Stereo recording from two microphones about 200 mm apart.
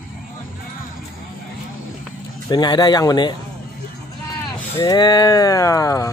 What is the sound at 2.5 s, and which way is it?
Speech, 20° left (ahead or behind).